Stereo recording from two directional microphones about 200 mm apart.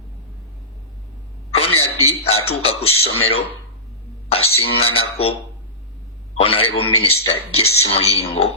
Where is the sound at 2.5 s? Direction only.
30° left (ahead or behind).